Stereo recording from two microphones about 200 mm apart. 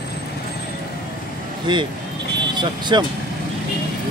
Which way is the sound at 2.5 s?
20° right (ahead or behind).